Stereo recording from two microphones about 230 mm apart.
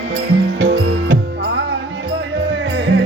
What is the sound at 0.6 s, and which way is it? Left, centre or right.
Music, right.